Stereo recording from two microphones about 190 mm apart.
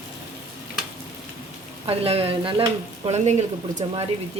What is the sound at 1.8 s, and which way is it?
Speech, 30° right (ahead or behind).